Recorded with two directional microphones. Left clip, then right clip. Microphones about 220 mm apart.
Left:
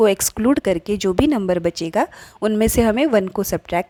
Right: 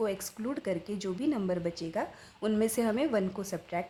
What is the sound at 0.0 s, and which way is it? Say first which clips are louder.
A woman's voice: left 17 dB; 45° left (ahead or behind).